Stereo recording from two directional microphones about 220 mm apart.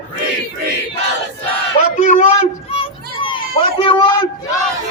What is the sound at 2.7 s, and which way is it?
Children playing, 25° left (ahead or behind).